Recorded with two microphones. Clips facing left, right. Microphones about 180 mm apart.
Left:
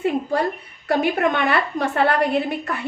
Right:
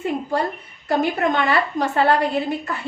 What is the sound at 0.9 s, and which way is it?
A woman's voice, 60° left (ahead or behind).